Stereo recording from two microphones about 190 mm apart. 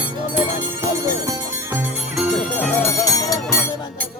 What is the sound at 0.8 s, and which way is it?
Music, 20° right (ahead or behind).